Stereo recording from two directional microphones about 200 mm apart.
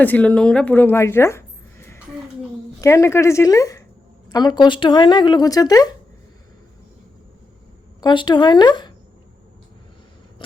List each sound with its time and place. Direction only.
0.0 s a woman's voice: 5° left (ahead or behind)
2.8 s a woman's voice: 15° left (ahead or behind)
8.0 s speech: 20° left (ahead or behind)